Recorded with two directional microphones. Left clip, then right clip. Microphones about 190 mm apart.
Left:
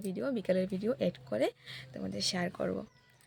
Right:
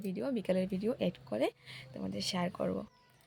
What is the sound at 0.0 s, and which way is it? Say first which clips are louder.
Speech: left 2 dB; 5° left (ahead or behind).